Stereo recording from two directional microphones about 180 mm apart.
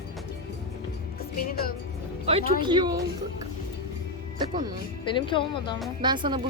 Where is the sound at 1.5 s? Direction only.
55° left (ahead or behind).